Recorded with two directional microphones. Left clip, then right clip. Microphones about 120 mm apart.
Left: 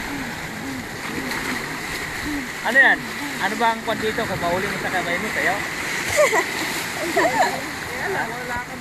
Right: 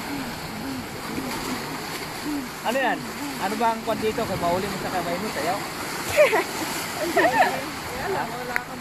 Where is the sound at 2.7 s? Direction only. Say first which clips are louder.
Left 9 dB; 55° right (ahead or behind).